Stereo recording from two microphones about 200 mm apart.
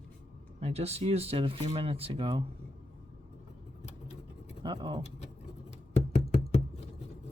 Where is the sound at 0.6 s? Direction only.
30° right (ahead or behind).